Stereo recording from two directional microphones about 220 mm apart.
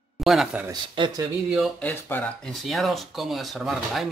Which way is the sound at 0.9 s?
20° right (ahead or behind).